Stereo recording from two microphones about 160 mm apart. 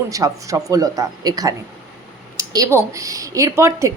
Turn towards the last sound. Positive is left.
turn(degrees=-20)  # may be behind; listen again after turning